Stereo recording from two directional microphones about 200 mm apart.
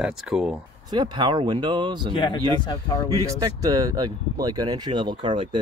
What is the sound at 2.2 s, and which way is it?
Speech, 25° left (ahead or behind).